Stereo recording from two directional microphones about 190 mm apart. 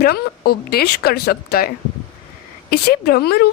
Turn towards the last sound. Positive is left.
turn(degrees=55)  # may be behind; listen again after turning